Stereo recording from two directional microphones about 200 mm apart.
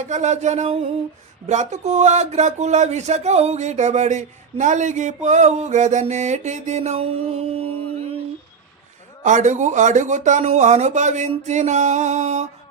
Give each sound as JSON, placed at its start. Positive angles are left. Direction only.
{"t": 0.0, "sound": "speech", "side_deg": -35}
{"t": 9.2, "sound": "speech", "side_deg": -40}